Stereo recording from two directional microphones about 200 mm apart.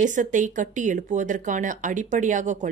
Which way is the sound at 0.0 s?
40° right (ahead or behind).